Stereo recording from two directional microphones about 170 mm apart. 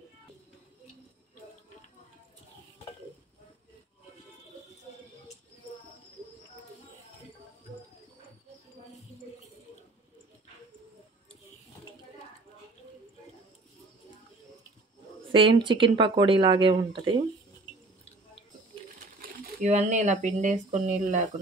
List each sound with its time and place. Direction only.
15.3 s speech: 30° right (ahead or behind)
19.6 s speech: 45° right (ahead or behind)